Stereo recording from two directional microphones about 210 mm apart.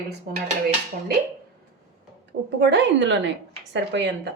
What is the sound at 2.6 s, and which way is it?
A woman's voice, 55° right (ahead or behind).